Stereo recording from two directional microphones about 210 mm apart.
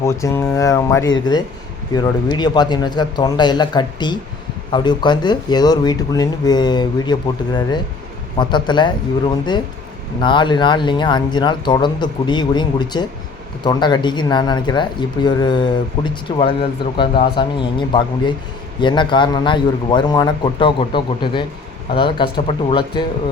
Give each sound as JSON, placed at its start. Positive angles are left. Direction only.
{"t": 0.0, "sound": "speech", "side_deg": 15}